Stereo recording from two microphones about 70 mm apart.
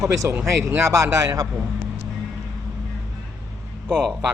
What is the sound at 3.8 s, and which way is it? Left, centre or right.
Speech, centre.